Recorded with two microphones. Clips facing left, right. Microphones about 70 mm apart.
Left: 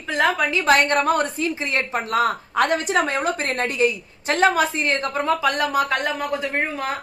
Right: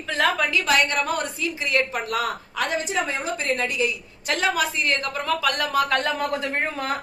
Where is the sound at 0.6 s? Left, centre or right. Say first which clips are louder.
Left 7 dB; left.